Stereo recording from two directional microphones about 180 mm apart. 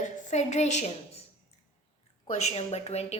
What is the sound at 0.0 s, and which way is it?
Speech, 40° left (ahead or behind).